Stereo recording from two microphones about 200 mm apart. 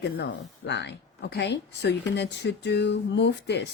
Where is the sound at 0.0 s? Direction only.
60° left (ahead or behind).